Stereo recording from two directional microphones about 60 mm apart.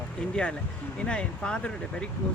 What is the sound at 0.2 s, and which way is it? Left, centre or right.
Speech, centre.